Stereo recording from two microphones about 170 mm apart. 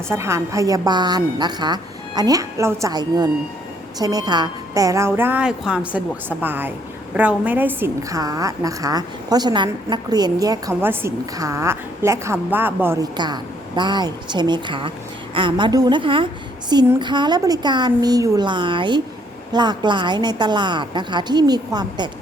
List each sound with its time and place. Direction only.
0.1 s a woman's voice: 15° right (ahead or behind)
13.1 s a woman's voice: 25° right (ahead or behind)